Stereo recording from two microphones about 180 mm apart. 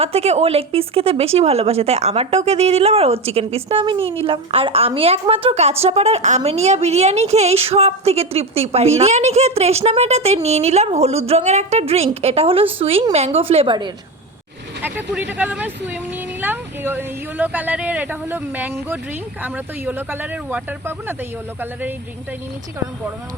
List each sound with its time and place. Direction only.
0.0 s speech: 35° right (ahead or behind)
14.8 s speech: 10° right (ahead or behind)